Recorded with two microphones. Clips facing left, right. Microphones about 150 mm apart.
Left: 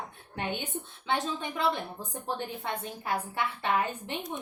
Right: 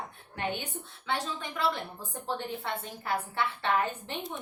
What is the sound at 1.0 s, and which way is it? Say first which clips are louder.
A woman's voice: left 2 dB; 20° left (ahead or behind).